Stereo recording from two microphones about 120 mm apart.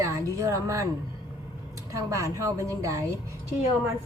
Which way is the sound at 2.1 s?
25° right (ahead or behind).